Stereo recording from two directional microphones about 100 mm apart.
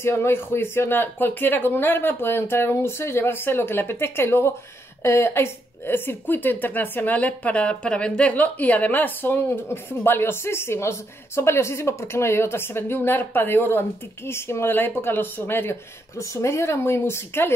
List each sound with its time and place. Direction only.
0.0 s speech: 25° left (ahead or behind)